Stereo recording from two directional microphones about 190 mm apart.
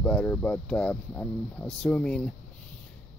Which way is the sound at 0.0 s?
5° left (ahead or behind).